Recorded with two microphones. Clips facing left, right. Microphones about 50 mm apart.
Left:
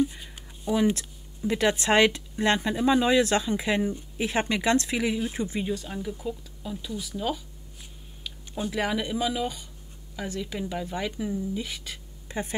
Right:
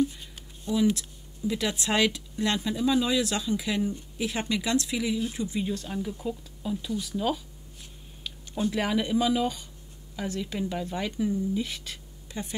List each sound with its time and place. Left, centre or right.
0.2 s a sound: centre
0.7 s speech: left
5.7 s speech: centre
12.3 s speech: left